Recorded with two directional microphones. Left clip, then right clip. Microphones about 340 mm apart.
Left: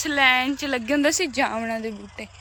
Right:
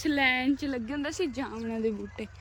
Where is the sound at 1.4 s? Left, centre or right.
Left.